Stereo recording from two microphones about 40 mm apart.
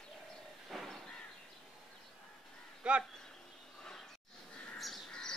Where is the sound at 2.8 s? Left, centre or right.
Right.